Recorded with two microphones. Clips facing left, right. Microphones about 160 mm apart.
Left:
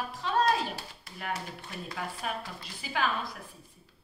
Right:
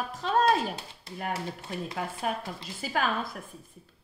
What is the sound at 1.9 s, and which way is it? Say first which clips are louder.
Speech: right 3 dB; 30° right (ahead or behind).